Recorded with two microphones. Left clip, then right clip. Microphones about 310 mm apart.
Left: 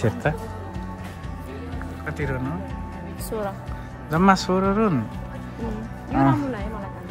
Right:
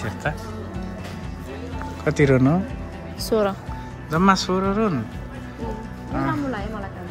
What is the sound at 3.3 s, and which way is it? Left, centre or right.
Speech, right.